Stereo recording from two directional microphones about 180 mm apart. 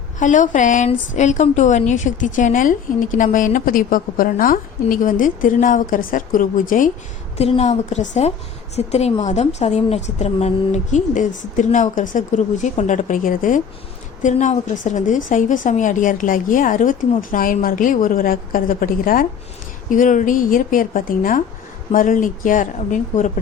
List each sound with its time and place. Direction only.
0.2 s a woman's voice: 45° left (ahead or behind)
7.3 s a woman's voice: 35° left (ahead or behind)